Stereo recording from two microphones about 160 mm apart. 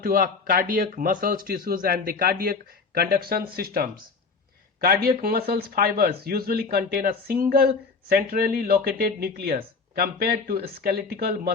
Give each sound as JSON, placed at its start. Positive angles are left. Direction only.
{"t": 0.0, "sound": "speech", "side_deg": -65}
{"t": 5.0, "sound": "speech", "side_deg": -70}